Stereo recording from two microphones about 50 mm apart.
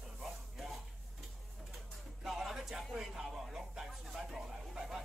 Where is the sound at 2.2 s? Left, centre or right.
Centre.